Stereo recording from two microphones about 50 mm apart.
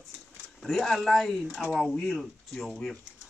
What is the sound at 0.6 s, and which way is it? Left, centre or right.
Speech, centre.